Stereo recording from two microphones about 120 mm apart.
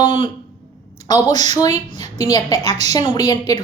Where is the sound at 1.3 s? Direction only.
75° right (ahead or behind).